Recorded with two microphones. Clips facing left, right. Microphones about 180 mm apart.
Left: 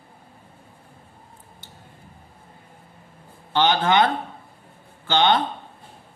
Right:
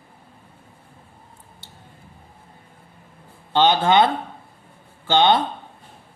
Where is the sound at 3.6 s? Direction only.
25° right (ahead or behind).